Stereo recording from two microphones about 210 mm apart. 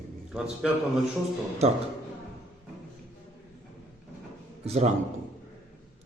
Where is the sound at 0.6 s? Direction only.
5° right (ahead or behind).